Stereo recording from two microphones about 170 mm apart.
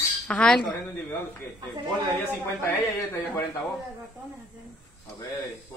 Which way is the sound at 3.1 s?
15° left (ahead or behind).